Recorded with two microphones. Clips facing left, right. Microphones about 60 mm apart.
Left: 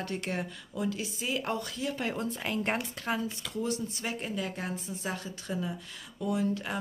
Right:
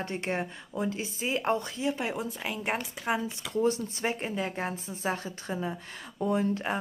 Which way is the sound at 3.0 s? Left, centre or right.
Centre.